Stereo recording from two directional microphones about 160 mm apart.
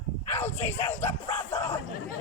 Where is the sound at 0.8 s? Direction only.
15° left (ahead or behind).